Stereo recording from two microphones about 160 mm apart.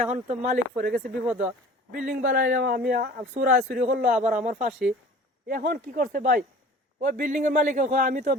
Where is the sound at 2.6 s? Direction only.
70° right (ahead or behind).